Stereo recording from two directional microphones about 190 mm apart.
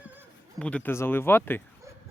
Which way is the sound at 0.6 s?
5° left (ahead or behind).